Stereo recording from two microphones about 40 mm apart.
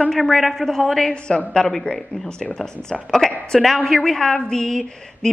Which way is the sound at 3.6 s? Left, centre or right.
Centre.